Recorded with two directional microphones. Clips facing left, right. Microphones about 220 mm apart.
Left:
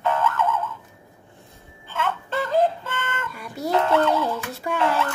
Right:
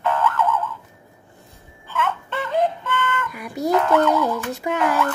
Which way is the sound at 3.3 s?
15° right (ahead or behind).